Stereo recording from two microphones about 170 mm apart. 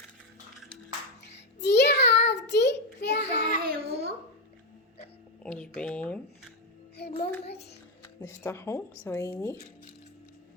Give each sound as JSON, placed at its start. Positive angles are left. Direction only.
{"t": 1.5, "sound": "child singing", "side_deg": 85}
{"t": 3.6, "sound": "babbling", "side_deg": -65}
{"t": 5.4, "sound": "a sound", "side_deg": 5}
{"t": 6.9, "sound": "music", "side_deg": 70}
{"t": 7.4, "sound": "a sound", "side_deg": 75}
{"t": 8.2, "sound": "speech", "side_deg": 15}